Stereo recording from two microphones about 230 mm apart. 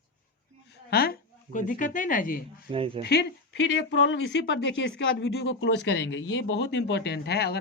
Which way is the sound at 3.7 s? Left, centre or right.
Left.